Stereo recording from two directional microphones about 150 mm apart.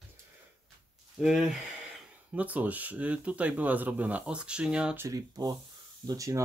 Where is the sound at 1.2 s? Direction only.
5° right (ahead or behind).